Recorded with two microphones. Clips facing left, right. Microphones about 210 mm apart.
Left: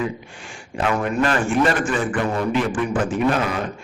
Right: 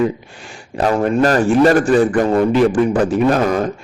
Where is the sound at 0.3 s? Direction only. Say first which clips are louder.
Right 6 dB; 35° right (ahead or behind).